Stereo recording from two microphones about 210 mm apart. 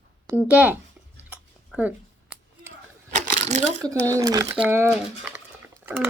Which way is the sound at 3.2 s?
35° right (ahead or behind).